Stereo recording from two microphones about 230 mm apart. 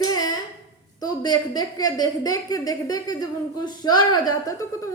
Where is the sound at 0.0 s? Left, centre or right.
Centre.